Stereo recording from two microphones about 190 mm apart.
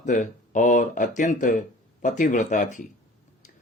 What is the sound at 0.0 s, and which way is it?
A man's voice, 40° left (ahead or behind).